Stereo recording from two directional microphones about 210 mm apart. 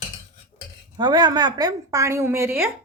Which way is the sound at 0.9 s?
20° right (ahead or behind).